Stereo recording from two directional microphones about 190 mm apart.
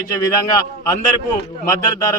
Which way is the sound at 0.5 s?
20° left (ahead or behind).